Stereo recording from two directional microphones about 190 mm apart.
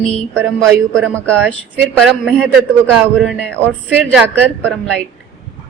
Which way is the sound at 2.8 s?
10° right (ahead or behind).